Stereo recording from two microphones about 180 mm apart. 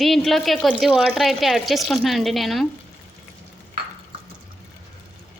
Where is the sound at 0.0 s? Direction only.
Centre (ahead or behind).